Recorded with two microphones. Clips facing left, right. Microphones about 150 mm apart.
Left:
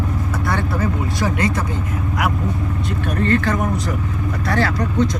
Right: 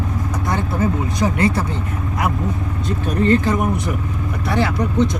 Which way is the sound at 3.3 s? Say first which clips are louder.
Right 3 dB; 20° right (ahead or behind).